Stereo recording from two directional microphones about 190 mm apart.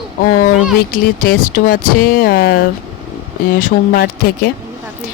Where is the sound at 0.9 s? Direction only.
45° left (ahead or behind).